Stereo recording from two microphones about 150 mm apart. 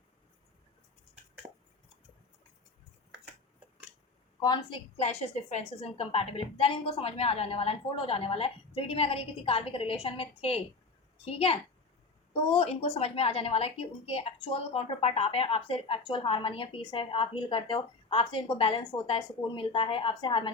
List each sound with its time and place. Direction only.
4.4 s a woman's voice: 30° left (ahead or behind)
4.9 s a woman's voice: 45° left (ahead or behind)